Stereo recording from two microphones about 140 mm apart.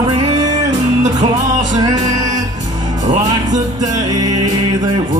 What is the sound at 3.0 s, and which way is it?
Music, 60° right (ahead or behind).